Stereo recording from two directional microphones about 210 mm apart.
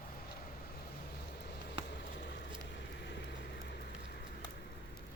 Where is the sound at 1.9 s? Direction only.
50° left (ahead or behind).